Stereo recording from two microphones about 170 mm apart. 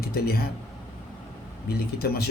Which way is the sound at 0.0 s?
60° left (ahead or behind).